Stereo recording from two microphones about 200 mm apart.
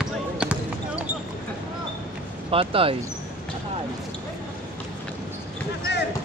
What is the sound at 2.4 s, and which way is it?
Speech, 25° right (ahead or behind).